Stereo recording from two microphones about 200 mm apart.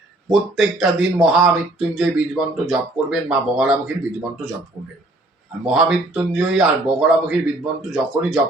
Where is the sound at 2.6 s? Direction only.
5° right (ahead or behind).